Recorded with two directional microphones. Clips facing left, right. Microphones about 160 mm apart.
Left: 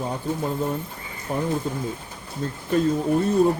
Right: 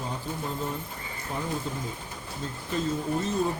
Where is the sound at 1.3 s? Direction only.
55° left (ahead or behind).